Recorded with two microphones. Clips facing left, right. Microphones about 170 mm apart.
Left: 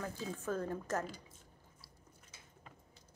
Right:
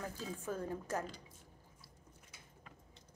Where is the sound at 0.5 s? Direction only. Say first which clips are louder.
Left 3 dB; 10° right (ahead or behind).